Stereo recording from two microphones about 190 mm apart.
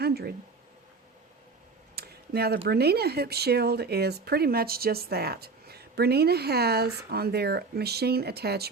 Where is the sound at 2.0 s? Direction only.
55° right (ahead or behind).